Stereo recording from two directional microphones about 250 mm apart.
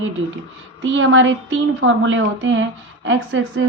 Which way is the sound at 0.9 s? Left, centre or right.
Right.